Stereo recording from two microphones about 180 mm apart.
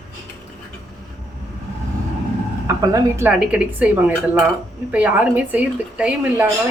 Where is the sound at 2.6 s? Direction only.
15° right (ahead or behind).